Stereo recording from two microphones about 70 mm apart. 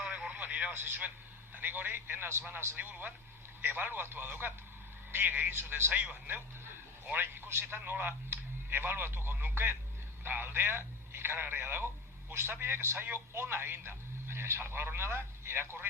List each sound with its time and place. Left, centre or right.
0.3 s radio: right
0.7 s a man's voice: right
2.7 s a man's voice: right